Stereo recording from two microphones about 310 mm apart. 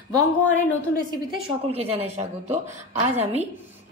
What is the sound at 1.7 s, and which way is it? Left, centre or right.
Speech, centre.